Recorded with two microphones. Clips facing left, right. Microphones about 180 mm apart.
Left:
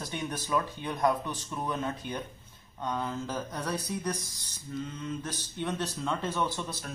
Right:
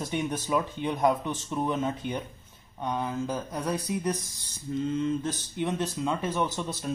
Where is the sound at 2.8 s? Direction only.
15° right (ahead or behind).